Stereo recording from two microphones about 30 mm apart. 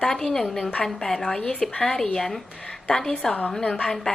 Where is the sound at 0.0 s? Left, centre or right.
Centre.